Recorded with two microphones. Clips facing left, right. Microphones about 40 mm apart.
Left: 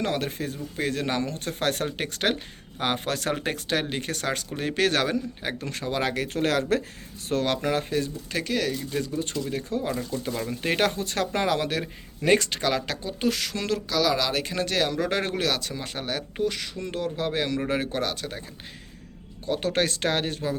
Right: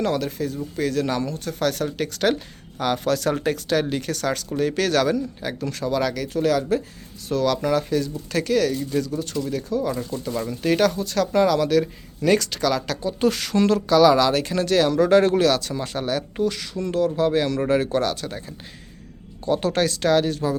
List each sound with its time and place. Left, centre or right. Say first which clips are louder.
0.0 s speech: right 4 dB; left
6.2 s speech: right 3 dB; left
7.3 s speech: right 4 dB; left
8.3 s speech: right 8 dB; centre
9.0 s speech: right 4 dB; left
9.9 s speech: right 2 dB; centre
10.5 s speech: right 5 dB; left
13.0 s speech: right 5 dB; centre
19.5 s speech: right 4 dB; centre
19.9 s speech: right 7 dB; left